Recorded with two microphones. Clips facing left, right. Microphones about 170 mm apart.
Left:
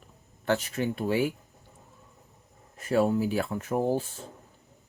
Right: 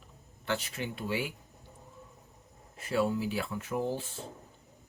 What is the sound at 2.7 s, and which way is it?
Speech, 45° left (ahead or behind).